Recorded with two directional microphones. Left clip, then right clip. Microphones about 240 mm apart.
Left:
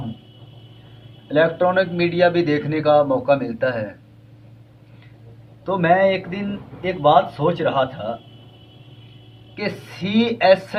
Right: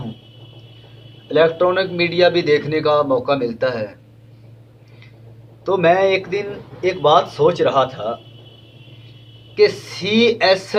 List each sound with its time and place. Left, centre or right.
1.3 s speech: centre
5.6 s speech: right
9.6 s speech: centre